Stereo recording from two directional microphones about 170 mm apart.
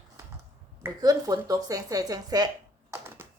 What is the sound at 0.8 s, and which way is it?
Speech, 20° right (ahead or behind).